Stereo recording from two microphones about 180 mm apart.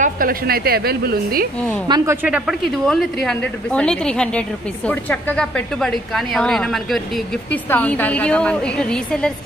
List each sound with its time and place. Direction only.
0.0 s a woman's voice: 50° right (ahead or behind)
1.9 s speech: 25° right (ahead or behind)
2.2 s a woman's voice: 5° right (ahead or behind)